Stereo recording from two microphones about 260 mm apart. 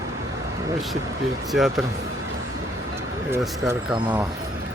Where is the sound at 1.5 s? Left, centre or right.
Centre.